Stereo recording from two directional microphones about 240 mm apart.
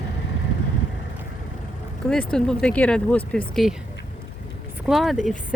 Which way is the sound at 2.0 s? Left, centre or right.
Centre.